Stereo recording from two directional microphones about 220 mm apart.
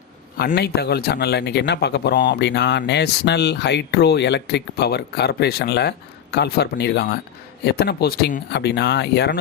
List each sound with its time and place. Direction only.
0.3 s speech: 50° left (ahead or behind)